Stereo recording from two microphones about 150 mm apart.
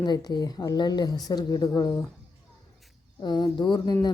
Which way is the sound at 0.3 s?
25° left (ahead or behind).